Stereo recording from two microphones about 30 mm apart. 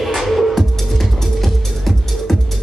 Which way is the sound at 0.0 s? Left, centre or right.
Centre.